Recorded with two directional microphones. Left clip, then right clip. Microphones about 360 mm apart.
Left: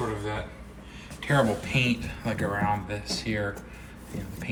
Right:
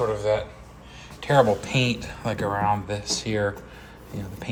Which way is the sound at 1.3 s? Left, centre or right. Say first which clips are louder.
Right 6 dB; centre.